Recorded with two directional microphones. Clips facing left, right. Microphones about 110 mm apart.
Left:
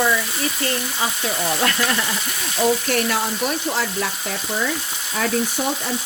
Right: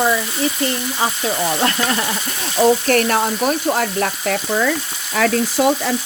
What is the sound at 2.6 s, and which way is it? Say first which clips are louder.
Frying: right 5 dB; 50° right (ahead or behind).